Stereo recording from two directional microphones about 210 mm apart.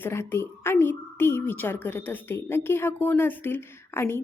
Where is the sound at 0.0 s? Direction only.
10° left (ahead or behind).